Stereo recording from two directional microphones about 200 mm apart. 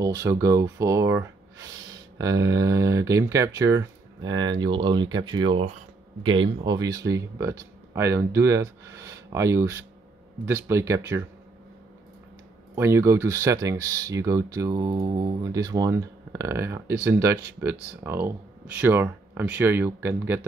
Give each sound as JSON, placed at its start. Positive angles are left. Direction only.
{"t": 0.0, "sound": "speech", "side_deg": -15}
{"t": 12.7, "sound": "speech", "side_deg": -15}